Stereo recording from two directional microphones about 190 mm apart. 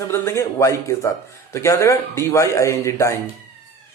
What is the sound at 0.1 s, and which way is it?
A man's voice, 15° left (ahead or behind).